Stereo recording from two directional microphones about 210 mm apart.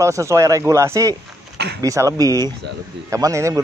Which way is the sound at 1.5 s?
50° right (ahead or behind).